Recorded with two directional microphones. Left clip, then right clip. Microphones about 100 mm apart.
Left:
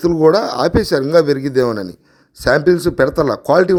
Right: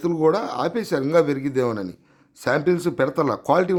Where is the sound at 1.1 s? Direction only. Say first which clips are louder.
Left 6 dB; 35° left (ahead or behind).